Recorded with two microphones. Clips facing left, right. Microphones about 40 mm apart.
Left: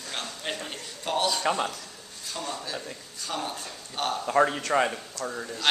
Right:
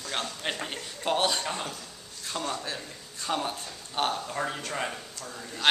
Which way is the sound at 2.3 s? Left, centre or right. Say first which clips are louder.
Right 1 dB; right.